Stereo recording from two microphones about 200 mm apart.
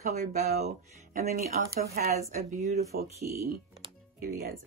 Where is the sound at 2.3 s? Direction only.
40° right (ahead or behind).